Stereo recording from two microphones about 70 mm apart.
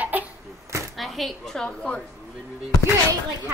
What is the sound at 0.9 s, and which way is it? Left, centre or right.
A woman's voice, centre.